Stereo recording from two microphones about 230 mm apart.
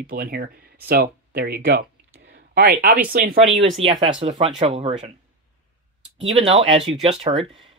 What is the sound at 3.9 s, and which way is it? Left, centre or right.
Speech, right.